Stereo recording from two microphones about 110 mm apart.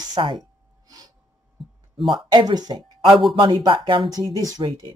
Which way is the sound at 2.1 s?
45° right (ahead or behind).